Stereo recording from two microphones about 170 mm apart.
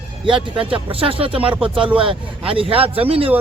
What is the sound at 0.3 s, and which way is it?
Speech, 30° right (ahead or behind).